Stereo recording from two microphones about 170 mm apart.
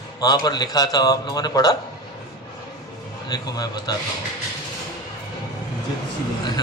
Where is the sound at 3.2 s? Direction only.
25° left (ahead or behind).